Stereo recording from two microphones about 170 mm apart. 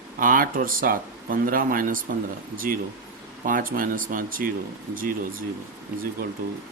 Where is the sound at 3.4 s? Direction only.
55° right (ahead or behind).